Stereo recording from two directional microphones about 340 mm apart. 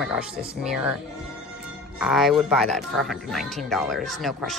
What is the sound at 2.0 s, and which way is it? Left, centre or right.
Speech, centre.